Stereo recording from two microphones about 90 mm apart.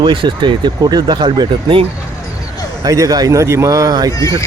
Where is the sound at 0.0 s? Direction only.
65° right (ahead or behind).